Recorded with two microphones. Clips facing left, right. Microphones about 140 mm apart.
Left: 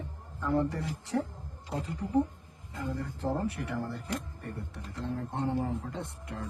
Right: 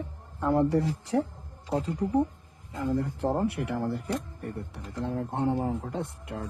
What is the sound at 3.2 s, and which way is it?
Speech, 70° right (ahead or behind).